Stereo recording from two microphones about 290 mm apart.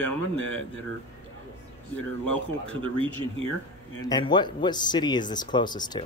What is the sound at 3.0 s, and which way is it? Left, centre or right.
Speech, centre.